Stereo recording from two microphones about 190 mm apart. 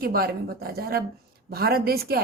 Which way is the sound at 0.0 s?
50° right (ahead or behind).